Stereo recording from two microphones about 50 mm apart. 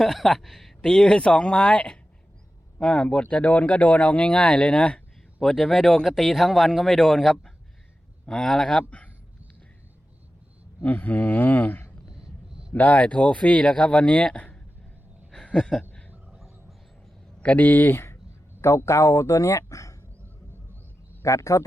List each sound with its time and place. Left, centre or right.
0.0 s speech: centre
0.8 s speech: centre
5.4 s speech: centre
10.8 s speech: left
12.0 s vehicle: centre
12.7 s speech: left
15.4 s a sound: centre
17.4 s speech: left
18.6 s speech: left
21.2 s speech: left